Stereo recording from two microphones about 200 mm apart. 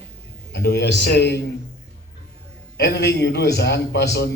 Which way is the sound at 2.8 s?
55° left (ahead or behind).